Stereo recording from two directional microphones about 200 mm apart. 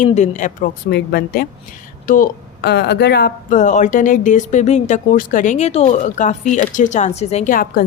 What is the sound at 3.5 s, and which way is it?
Speech, 40° left (ahead or behind).